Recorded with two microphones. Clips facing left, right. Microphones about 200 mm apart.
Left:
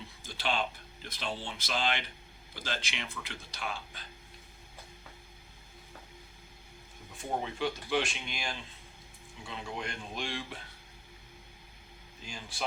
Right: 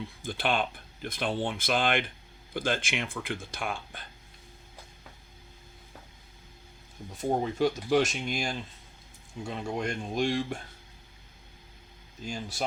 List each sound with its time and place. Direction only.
0.2 s speech: 55° right (ahead or behind)
7.2 s speech: 40° right (ahead or behind)
12.2 s speech: 40° right (ahead or behind)